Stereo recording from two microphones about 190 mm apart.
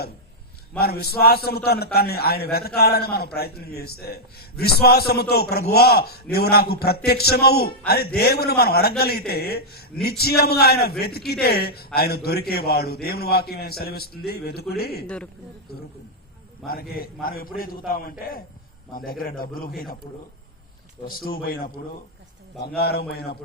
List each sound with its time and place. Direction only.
0.8 s a man's voice: 55° left (ahead or behind)
15.0 s a man's voice: 5° left (ahead or behind)
16.6 s a man's voice: 50° left (ahead or behind)
21.1 s a man's voice: 50° left (ahead or behind)